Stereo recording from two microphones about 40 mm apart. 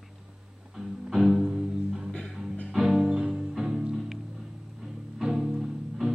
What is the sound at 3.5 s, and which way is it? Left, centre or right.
Music, centre.